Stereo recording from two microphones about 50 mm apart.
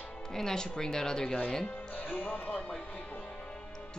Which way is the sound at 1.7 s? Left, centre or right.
Left.